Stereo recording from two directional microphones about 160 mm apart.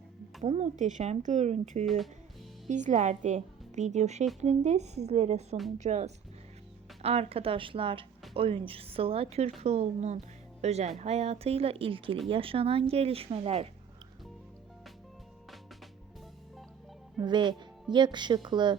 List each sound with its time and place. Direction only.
0.4 s a woman's voice: 45° right (ahead or behind)
17.2 s speech: 30° right (ahead or behind)